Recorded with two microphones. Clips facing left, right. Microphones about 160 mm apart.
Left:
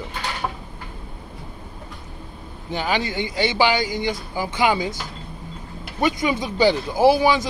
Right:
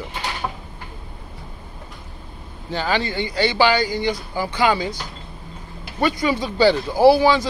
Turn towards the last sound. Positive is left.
turn(degrees=15)  # may be behind; listen again after turning